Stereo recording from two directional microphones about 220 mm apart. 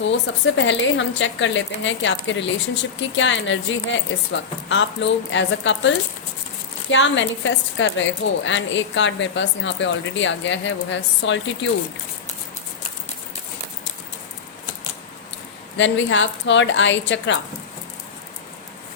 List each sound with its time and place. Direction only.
0.0 s a woman's voice: 55° left (ahead or behind)
15.8 s a woman's voice: 55° left (ahead or behind)